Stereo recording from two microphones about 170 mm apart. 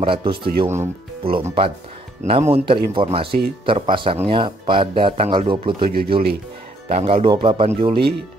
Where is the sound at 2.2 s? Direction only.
35° right (ahead or behind).